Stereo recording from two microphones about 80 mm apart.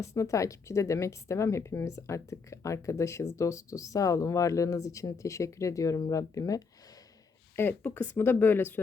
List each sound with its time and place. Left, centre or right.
0.0 s speech: left
7.5 s speech: left